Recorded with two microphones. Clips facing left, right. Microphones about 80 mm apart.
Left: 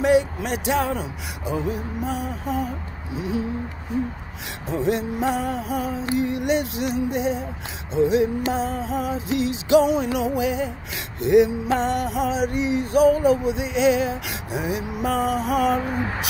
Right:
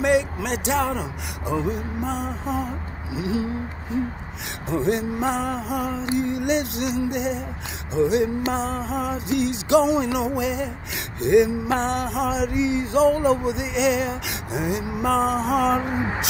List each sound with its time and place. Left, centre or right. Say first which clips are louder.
0.0 s speech: left 2 dB; right
2.4 s a sound: left 1 dB; left
3.2 s music: right 1 dB; right
4.6 s music: even; right
5.7 s speech: even; right
6.1 s music: left 1 dB; right
15.0 s speech: right 2 dB; right
15.8 s a sound: right 1 dB; centre